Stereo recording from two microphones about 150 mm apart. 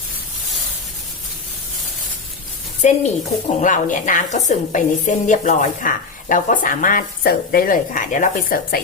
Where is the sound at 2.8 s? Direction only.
50° left (ahead or behind).